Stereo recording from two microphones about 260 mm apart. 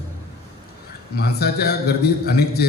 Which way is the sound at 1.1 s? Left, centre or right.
Left.